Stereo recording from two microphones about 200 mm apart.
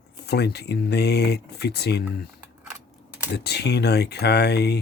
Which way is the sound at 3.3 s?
55° left (ahead or behind).